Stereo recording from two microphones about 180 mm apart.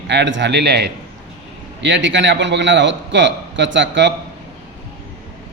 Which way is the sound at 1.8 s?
90° right.